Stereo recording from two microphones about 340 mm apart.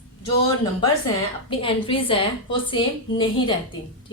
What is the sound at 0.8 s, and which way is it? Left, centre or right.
A woman's voice, centre.